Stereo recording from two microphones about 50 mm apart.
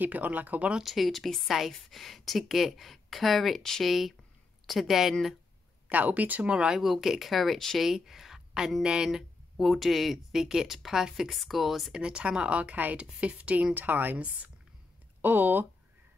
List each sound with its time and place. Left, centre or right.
0.0 s speech: right
0.7 s speech: centre
5.9 s speech: right
6.7 s speech: centre
7.8 s speech: centre
11.9 s speech: centre
13.7 s speech: right
15.2 s speech: right